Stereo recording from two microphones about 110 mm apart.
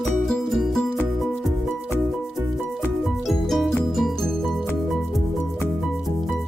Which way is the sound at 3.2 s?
Centre (ahead or behind).